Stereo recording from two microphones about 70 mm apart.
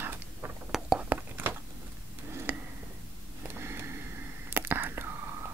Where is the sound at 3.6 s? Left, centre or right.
Right.